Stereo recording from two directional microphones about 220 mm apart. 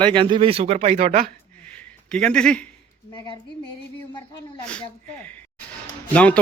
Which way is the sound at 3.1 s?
20° left (ahead or behind).